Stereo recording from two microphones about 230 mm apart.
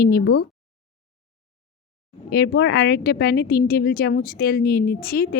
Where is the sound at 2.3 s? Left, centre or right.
Left.